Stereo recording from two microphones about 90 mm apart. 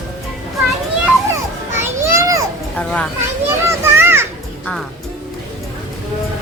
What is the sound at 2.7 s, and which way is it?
Children playing, 10° left (ahead or behind).